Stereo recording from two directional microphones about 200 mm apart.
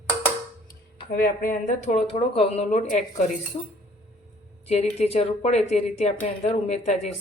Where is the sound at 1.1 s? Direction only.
45° left (ahead or behind).